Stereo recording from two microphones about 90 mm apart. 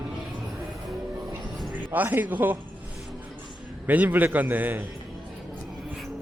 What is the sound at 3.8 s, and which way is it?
A man's voice, 20° right (ahead or behind).